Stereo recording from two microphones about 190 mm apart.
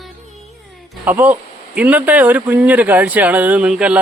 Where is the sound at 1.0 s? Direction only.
10° right (ahead or behind).